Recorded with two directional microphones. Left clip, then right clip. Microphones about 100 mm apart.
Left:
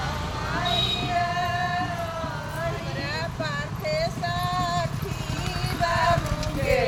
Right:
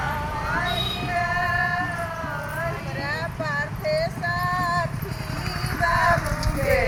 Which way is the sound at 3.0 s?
25° left (ahead or behind).